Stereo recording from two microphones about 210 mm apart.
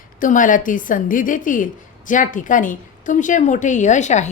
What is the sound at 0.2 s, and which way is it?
A woman's voice, 40° left (ahead or behind).